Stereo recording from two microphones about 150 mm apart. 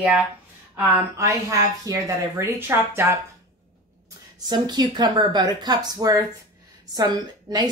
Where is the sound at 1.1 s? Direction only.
20° right (ahead or behind).